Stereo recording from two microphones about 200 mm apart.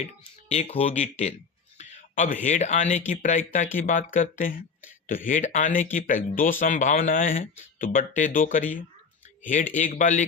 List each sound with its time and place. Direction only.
0.0 s speech: 30° left (ahead or behind)